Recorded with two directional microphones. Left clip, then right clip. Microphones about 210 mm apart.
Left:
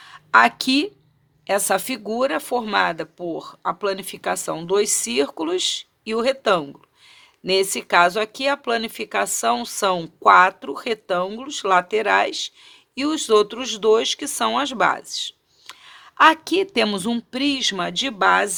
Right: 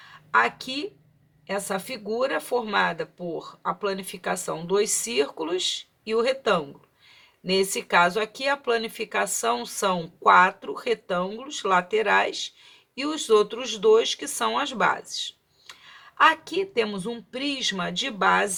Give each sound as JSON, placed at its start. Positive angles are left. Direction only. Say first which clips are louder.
{"t": 0.1, "sound": "speech", "louder": "left 7 dB", "side_deg": 50}